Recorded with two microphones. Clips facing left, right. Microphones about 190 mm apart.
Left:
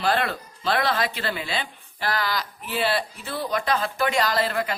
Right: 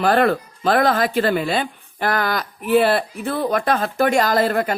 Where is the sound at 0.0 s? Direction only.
50° right (ahead or behind).